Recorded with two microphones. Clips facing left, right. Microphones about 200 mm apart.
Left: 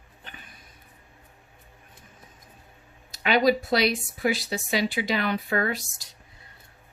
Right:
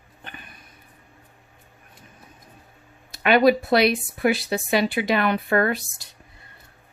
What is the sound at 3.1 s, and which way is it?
A woman's voice, 60° right (ahead or behind).